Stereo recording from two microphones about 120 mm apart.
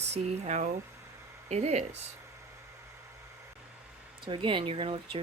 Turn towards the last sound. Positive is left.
turn(degrees=-50)  # may be behind; listen again after turning